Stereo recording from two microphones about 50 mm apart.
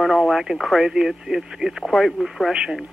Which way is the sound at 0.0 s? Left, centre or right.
Centre.